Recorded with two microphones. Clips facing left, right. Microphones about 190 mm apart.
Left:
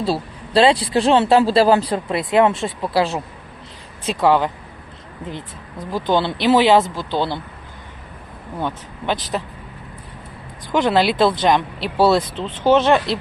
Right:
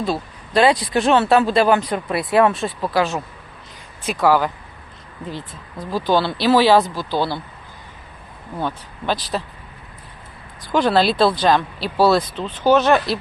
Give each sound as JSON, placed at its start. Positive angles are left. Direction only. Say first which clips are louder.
{"t": 0.0, "sound": "speech", "louder": "left 2 dB", "side_deg": 30}
{"t": 5.9, "sound": "speech", "louder": "even", "side_deg": 20}
{"t": 8.6, "sound": "speech", "louder": "even", "side_deg": 20}
{"t": 10.7, "sound": "speech", "louder": "even", "side_deg": 20}